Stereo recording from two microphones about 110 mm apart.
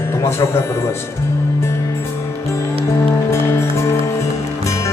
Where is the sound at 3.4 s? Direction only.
25° left (ahead or behind).